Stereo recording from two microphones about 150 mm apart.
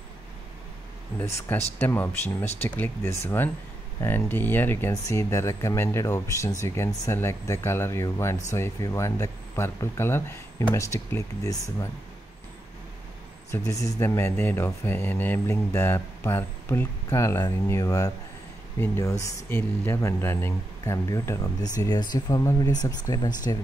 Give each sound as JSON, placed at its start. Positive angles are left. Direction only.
{"t": 1.8, "sound": "speech", "side_deg": 15}
{"t": 13.5, "sound": "speech", "side_deg": 20}